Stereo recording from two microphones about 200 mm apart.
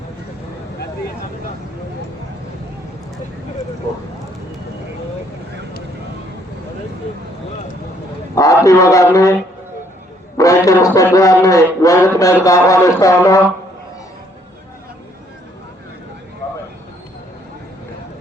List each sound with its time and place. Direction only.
8.4 s a man's voice: 15° left (ahead or behind)